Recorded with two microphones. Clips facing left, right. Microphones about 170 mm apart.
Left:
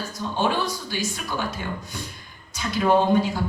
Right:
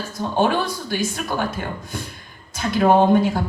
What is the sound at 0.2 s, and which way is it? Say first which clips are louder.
A woman's voice: right 5 dB; 50° right (ahead or behind).